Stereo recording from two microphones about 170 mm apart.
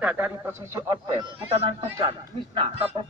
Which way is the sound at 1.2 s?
35° right (ahead or behind).